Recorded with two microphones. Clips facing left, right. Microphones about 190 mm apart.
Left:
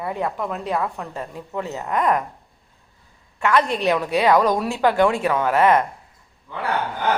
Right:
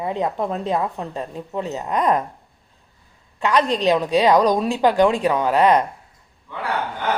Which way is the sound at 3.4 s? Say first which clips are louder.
Right 1 dB; 20° right (ahead or behind).